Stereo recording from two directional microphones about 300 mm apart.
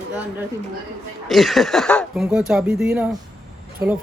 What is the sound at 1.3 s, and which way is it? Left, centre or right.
Speech, centre.